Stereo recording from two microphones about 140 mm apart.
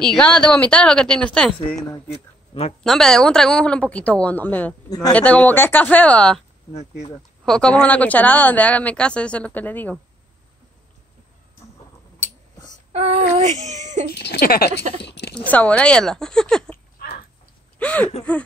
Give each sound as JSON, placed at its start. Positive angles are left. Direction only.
{"t": 0.0, "sound": "a woman's voice", "side_deg": 5}
{"t": 2.8, "sound": "speech", "side_deg": 5}
{"t": 4.8, "sound": "speech", "side_deg": 25}
{"t": 5.1, "sound": "speech", "side_deg": 10}
{"t": 7.4, "sound": "speech", "side_deg": 5}
{"t": 12.9, "sound": "child singing", "side_deg": -50}
{"t": 14.4, "sound": "speech", "side_deg": 90}
{"t": 15.3, "sound": "a woman's voice", "side_deg": 10}
{"t": 16.7, "sound": "a sound", "side_deg": 90}
{"t": 17.7, "sound": "speech", "side_deg": 10}